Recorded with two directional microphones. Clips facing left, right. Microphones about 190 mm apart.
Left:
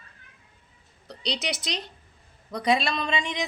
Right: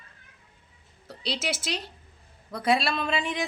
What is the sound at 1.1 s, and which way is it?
A woman's voice, 5° right (ahead or behind).